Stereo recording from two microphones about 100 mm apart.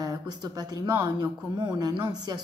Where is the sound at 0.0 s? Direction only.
40° right (ahead or behind).